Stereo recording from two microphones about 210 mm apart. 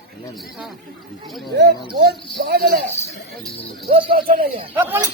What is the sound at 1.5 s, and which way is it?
Speech, 55° right (ahead or behind).